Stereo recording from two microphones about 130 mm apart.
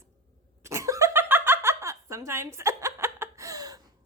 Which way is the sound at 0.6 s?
25° right (ahead or behind).